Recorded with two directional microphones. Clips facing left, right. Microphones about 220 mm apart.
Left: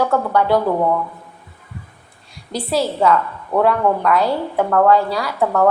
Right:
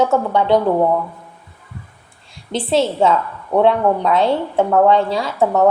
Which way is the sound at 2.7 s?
25° right (ahead or behind).